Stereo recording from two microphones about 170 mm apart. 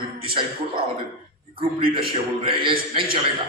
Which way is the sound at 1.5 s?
30° right (ahead or behind).